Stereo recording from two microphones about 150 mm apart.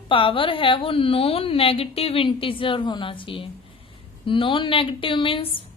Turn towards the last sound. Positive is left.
turn(degrees=35)  # may be behind; listen again after turning